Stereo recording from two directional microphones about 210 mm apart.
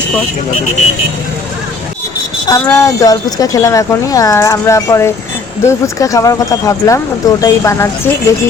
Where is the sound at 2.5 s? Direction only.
15° left (ahead or behind).